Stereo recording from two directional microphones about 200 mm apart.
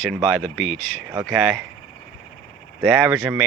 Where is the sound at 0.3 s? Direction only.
5° left (ahead or behind).